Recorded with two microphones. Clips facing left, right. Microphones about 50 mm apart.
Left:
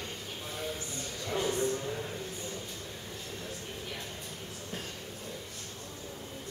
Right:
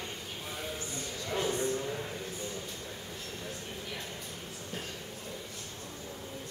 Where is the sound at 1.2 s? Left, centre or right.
Centre.